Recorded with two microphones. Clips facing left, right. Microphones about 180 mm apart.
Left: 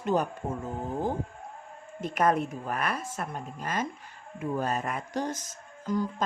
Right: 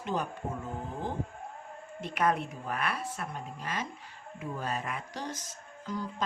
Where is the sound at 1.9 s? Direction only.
45° left (ahead or behind).